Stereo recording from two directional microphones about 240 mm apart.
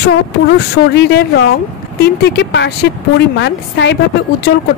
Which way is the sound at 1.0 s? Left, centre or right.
Left.